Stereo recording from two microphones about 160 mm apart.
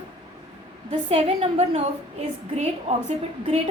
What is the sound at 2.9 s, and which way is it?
Speech, 45° right (ahead or behind).